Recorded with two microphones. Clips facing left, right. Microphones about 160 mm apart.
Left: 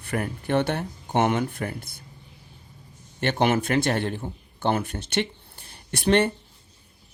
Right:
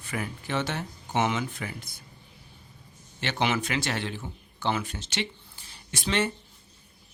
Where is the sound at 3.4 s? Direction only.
50° left (ahead or behind).